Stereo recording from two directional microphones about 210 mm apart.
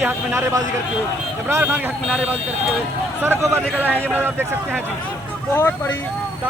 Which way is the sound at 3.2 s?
10° right (ahead or behind).